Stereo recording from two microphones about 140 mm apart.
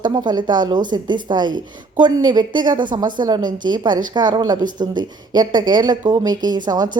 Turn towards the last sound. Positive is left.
turn(degrees=-30)  # may be behind; listen again after turning